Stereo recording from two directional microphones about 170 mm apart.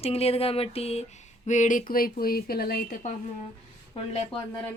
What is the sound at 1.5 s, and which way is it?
A woman's voice, 45° left (ahead or behind).